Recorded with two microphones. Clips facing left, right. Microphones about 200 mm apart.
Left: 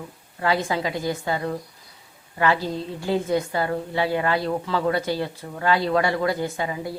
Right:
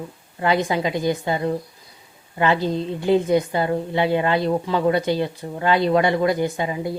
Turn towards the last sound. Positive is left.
turn(degrees=-20)  # may be behind; listen again after turning